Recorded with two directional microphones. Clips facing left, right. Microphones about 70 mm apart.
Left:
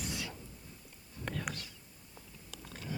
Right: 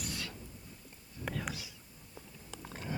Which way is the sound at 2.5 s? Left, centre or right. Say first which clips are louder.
Right 2 dB; right.